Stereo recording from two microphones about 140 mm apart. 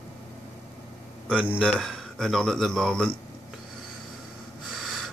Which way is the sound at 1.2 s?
10° right (ahead or behind).